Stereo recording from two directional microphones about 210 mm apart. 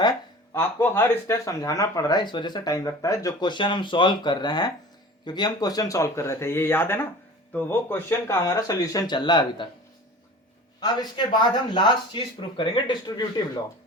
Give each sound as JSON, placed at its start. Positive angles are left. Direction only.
{"t": 0.5, "sound": "speech", "side_deg": 10}
{"t": 10.8, "sound": "speech", "side_deg": 20}